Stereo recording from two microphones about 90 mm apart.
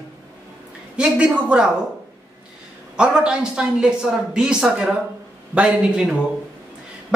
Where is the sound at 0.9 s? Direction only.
10° right (ahead or behind).